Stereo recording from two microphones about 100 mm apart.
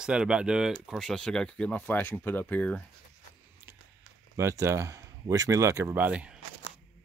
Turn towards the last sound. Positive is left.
turn(degrees=-15)  # may be behind; listen again after turning